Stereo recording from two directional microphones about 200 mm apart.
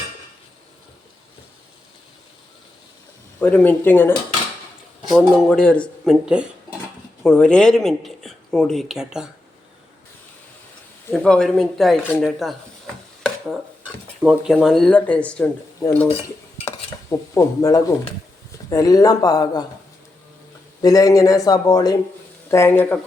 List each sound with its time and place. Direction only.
3.4 s speech: 10° left (ahead or behind)
5.0 s speech: centre (ahead or behind)
7.2 s speech: 5° left (ahead or behind)
11.1 s speech: 5° left (ahead or behind)
13.2 s dishes: centre (ahead or behind)
16.6 s dishes: 15° left (ahead or behind)
18.7 s speech: 15° left (ahead or behind)
20.8 s speech: 20° left (ahead or behind)